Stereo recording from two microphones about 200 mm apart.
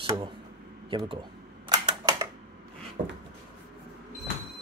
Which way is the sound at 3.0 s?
25° right (ahead or behind).